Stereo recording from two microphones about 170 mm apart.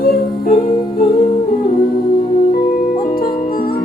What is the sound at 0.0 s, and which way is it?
Music, 60° left (ahead or behind).